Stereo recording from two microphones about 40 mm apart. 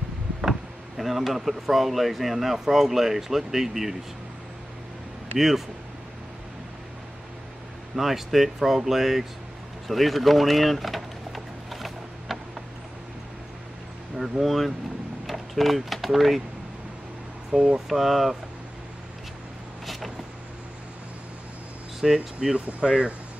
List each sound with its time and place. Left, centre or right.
0.4 s speech: centre
7.9 s speech: centre
9.8 s a sound: centre
14.4 s speech: centre
17.5 s speech: right
17.8 s speech: centre
22.0 s speech: centre